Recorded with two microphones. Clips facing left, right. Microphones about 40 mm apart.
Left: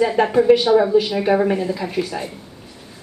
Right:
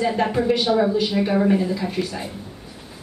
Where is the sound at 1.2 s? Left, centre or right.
Centre.